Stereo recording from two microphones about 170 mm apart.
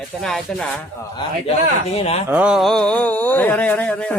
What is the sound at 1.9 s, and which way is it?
Speech, 40° left (ahead or behind).